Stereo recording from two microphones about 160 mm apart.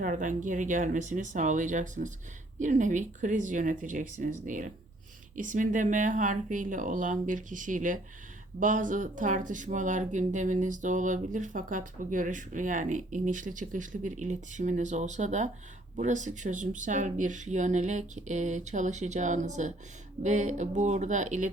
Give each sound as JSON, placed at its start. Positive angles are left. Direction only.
{"t": 0.0, "sound": "speech", "side_deg": -55}